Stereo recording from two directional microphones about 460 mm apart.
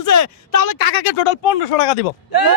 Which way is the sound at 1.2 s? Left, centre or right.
Left.